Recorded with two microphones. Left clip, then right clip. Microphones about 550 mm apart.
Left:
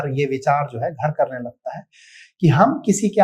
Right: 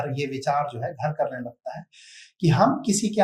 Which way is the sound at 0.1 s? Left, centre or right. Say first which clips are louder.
Left 6 dB; left.